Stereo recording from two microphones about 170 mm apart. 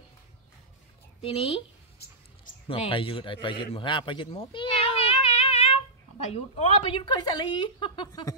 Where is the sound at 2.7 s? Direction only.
30° left (ahead or behind).